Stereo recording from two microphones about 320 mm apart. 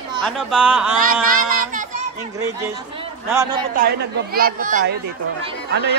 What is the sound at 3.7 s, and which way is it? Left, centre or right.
A woman's voice, right.